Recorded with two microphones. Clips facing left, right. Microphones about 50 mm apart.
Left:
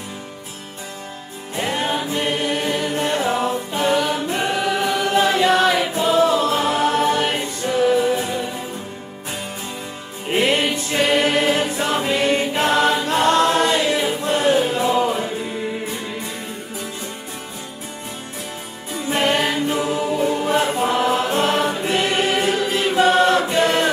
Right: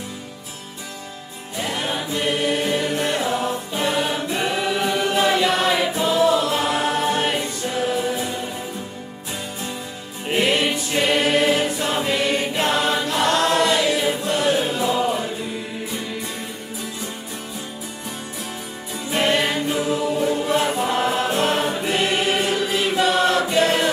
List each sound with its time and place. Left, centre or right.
1.6 s choir: left
5.4 s music: left
10.3 s music: left
11.7 s choir: left
14.9 s music: left
19.0 s music: left